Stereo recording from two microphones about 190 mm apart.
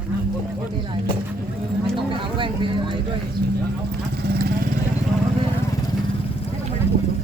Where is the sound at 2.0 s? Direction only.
25° right (ahead or behind).